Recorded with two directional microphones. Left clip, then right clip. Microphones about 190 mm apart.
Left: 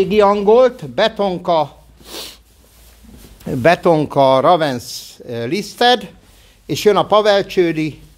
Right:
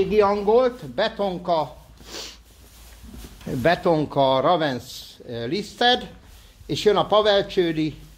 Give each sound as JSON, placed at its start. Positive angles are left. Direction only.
{"t": 0.0, "sound": "speech", "side_deg": 55}
{"t": 3.4, "sound": "a man's voice", "side_deg": 45}